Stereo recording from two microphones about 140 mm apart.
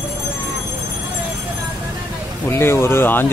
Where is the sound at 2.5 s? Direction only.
20° left (ahead or behind).